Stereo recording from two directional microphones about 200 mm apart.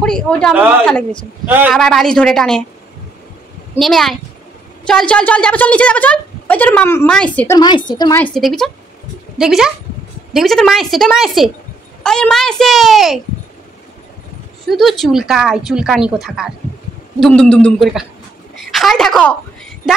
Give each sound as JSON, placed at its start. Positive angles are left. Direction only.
{"t": 0.0, "sound": "speech", "side_deg": 5}
{"t": 3.8, "sound": "a woman's voice", "side_deg": 0}
{"t": 7.5, "sound": "a woman's voice", "side_deg": 20}
{"t": 8.2, "sound": "speech", "side_deg": 0}
{"t": 14.7, "sound": "a woman's voice", "side_deg": 0}